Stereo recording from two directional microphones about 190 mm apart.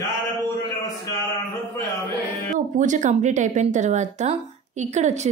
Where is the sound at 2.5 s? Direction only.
40° right (ahead or behind).